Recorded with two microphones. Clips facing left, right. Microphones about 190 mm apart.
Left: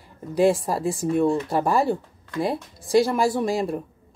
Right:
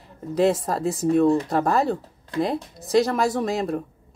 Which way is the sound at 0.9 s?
Centre (ahead or behind).